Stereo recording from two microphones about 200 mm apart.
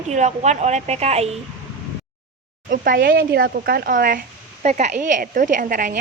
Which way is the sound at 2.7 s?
45° right (ahead or behind).